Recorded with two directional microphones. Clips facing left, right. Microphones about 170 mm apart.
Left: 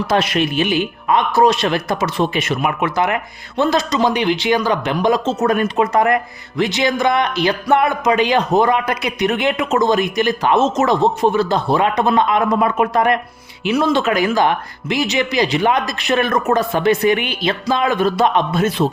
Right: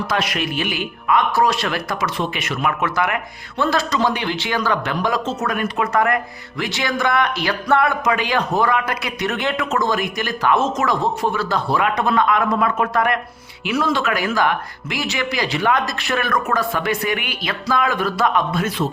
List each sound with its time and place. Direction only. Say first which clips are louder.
0.1 s speech: left 8 dB; 30° left (ahead or behind)
2.6 s speech: even; 20° left (ahead or behind)